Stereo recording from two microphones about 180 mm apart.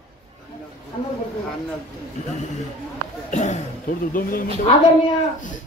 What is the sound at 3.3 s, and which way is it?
Speech, 40° left (ahead or behind).